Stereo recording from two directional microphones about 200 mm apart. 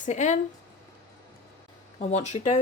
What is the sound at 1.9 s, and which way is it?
Speech, 35° left (ahead or behind).